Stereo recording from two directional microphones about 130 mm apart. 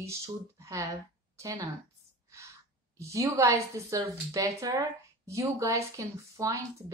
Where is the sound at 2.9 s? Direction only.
25° right (ahead or behind).